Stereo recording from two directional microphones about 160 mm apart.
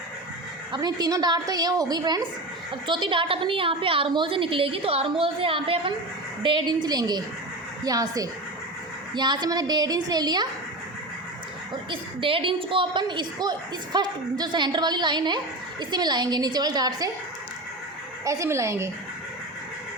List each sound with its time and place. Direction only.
0.7 s a woman's voice: 25° right (ahead or behind)
11.7 s a woman's voice: 30° right (ahead or behind)
18.3 s a woman's voice: 20° right (ahead or behind)